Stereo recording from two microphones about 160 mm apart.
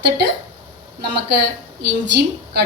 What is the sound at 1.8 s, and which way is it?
Speech, 90° right.